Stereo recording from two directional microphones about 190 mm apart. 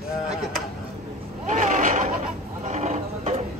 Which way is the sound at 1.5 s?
45° right (ahead or behind).